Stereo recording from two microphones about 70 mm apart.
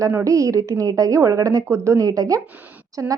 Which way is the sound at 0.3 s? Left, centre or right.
Right.